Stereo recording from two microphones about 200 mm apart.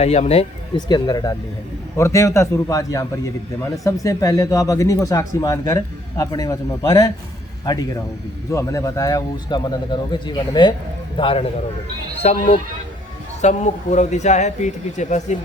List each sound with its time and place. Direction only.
0.0 s speech: 30° left (ahead or behind)
0.9 s speech: 20° left (ahead or behind); by 15.4 s 35° left (ahead or behind)